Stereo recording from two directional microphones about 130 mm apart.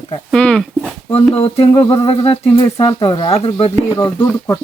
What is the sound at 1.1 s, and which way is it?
Speech, 50° left (ahead or behind).